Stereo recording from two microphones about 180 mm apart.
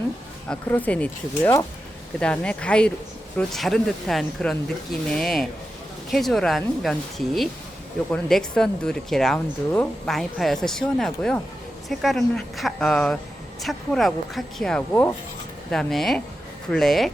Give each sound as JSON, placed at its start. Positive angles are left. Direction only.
{"t": 0.4, "sound": "speech", "side_deg": 10}